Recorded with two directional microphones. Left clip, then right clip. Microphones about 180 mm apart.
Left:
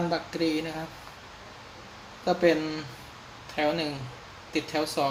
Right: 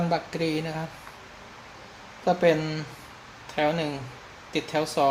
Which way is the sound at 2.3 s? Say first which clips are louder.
Right 2 dB; 40° right (ahead or behind).